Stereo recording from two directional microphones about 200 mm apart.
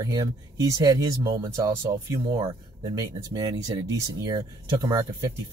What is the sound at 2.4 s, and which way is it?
Speech, 25° right (ahead or behind).